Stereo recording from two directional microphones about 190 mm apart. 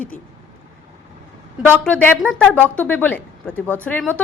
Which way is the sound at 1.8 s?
5° left (ahead or behind).